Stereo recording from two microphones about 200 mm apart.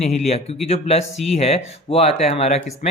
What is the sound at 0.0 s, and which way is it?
Speech, 30° left (ahead or behind).